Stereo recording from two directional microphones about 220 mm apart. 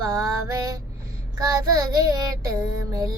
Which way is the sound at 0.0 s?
15° right (ahead or behind).